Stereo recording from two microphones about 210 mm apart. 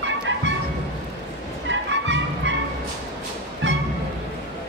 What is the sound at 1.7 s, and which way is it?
Music, 60° right (ahead or behind).